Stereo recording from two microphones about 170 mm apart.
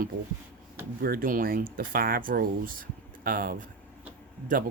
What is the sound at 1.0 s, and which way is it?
Speech, 60° right (ahead or behind).